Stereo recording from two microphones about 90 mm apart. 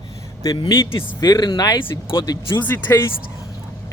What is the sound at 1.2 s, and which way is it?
Speech, 50° left (ahead or behind).